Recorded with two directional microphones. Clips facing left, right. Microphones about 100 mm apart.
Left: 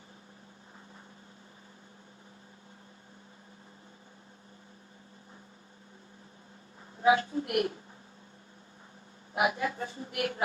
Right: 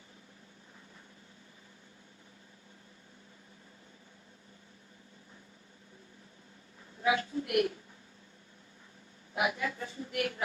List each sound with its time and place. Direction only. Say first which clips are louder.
7.0 s a woman's voice: left 5 dB; 35° left (ahead or behind)
9.3 s a woman's voice: left 3 dB; 30° left (ahead or behind)